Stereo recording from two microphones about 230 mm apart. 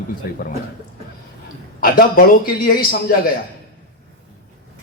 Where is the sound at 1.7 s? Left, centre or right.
Left.